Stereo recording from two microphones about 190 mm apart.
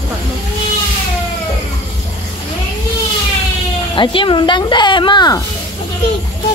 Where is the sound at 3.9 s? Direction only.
25° left (ahead or behind).